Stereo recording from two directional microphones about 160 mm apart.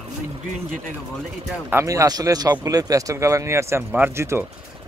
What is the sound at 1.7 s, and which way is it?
Speech, 20° right (ahead or behind).